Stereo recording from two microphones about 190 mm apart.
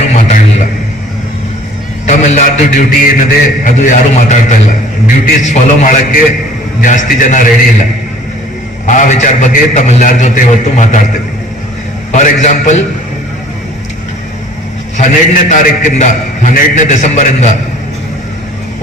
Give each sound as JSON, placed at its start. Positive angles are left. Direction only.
{"t": 0.1, "sound": "a sound", "side_deg": 40}
{"t": 2.0, "sound": "a man's voice", "side_deg": 40}
{"t": 8.9, "sound": "a man's voice", "side_deg": 40}
{"t": 12.1, "sound": "a man's voice", "side_deg": 40}
{"t": 14.9, "sound": "a man's voice", "side_deg": 40}